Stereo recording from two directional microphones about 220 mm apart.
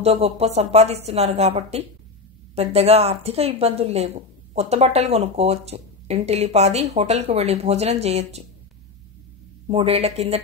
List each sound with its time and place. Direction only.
0.0 s speech: 25° right (ahead or behind)
9.7 s speech: 25° right (ahead or behind)